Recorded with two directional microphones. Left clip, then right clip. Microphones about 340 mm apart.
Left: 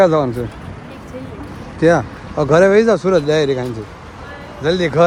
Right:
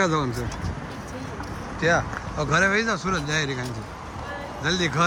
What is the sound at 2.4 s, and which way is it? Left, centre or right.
Speech, centre.